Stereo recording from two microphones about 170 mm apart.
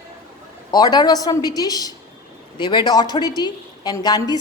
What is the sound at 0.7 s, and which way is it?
A woman's voice, 25° left (ahead or behind).